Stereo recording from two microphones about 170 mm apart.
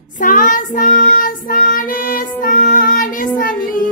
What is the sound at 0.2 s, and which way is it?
Child singing, 50° left (ahead or behind).